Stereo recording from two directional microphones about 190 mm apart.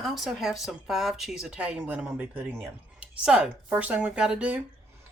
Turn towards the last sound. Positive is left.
turn(degrees=-5)  # may be behind; listen again after turning